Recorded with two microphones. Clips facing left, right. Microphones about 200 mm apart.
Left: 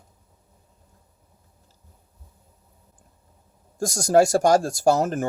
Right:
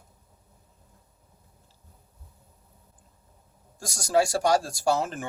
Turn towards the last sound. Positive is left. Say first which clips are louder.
# left 6 dB
turn(degrees=45)  # may be behind; listen again after turning